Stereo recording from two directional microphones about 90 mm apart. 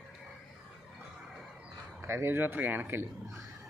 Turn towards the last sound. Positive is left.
turn(degrees=-25)  # may be behind; listen again after turning